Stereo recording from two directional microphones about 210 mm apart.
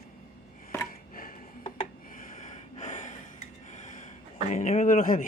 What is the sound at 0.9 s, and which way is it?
Chopping, 45° left (ahead or behind).